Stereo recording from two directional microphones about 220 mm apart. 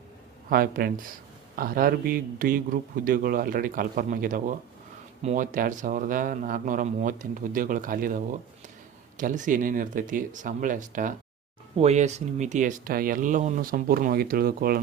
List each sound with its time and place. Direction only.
0.5 s speech: 40° right (ahead or behind)